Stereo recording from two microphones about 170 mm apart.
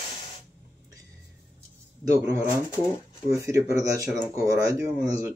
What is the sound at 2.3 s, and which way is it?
Speech, 15° right (ahead or behind).